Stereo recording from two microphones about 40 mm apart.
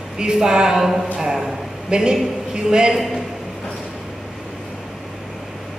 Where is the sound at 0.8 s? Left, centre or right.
Centre.